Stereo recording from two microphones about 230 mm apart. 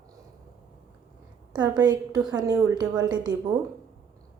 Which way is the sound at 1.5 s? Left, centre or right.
Centre.